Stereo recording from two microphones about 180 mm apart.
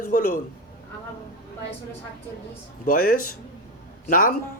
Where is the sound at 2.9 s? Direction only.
50° left (ahead or behind).